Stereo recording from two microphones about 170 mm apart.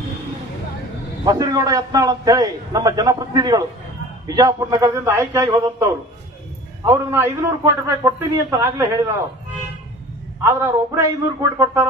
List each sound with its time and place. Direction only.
1.2 s a man's voice: 25° right (ahead or behind)
10.4 s a man's voice: 15° right (ahead or behind)